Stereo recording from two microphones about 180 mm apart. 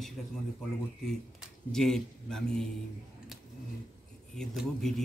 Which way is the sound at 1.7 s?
Centre (ahead or behind).